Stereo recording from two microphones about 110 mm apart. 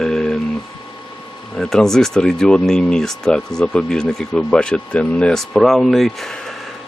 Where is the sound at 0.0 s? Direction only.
5° left (ahead or behind).